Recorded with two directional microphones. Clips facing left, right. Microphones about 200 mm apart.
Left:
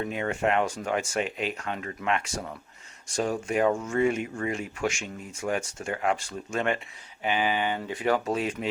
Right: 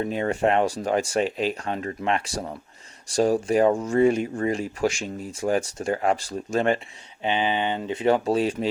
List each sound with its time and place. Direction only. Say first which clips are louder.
0.0 s speech: right 4 dB; 35° right (ahead or behind)
7.2 s speech: right 2 dB; 25° right (ahead or behind)